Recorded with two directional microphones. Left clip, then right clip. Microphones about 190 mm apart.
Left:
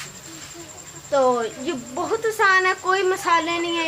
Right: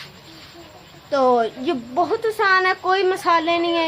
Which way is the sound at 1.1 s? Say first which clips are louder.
Right 2 dB; 30° right (ahead or behind).